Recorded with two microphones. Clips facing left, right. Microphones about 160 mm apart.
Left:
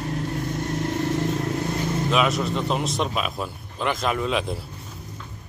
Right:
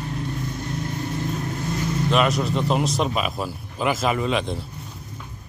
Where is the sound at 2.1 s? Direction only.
Centre (ahead or behind).